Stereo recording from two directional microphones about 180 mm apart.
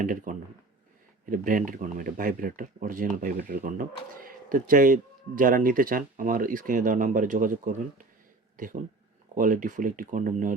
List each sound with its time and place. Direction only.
0.0 s speech: 45° right (ahead or behind)